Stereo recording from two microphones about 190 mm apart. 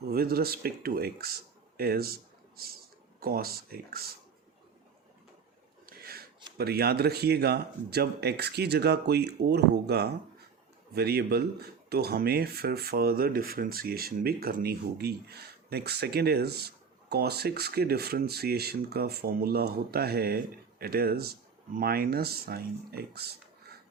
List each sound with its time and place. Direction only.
0.1 s speech: 55° right (ahead or behind)
5.8 s a sound: 50° right (ahead or behind)
6.6 s speech: 55° right (ahead or behind)